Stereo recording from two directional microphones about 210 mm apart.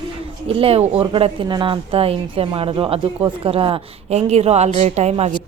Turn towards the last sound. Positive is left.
turn(degrees=-30)  # may be behind; listen again after turning